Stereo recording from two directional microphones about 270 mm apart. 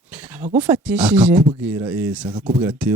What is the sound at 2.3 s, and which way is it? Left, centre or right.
Speech, centre.